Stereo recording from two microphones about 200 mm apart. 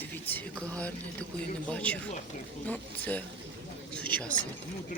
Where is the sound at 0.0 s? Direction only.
10° left (ahead or behind).